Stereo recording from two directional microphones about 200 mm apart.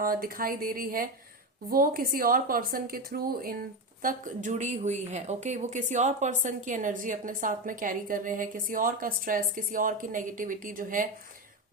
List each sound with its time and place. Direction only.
0.0 s a woman's voice: 45° right (ahead or behind)